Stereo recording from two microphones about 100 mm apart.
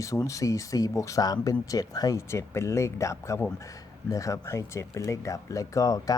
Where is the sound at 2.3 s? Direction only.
25° left (ahead or behind).